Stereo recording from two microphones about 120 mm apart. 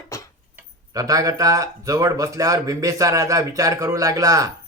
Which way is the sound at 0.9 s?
30° right (ahead or behind).